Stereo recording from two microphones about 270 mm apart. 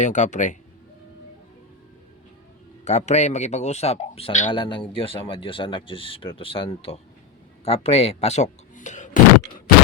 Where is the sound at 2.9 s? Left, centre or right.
Left.